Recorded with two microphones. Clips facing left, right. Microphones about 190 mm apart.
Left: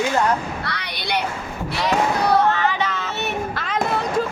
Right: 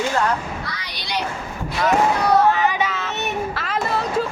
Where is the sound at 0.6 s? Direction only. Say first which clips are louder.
Left 4 dB; 65° left (ahead or behind).